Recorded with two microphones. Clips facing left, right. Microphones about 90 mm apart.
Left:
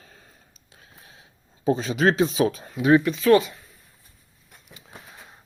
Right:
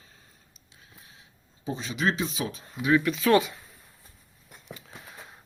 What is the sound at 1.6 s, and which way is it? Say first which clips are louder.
Speech: left 8 dB; 45° left (ahead or behind).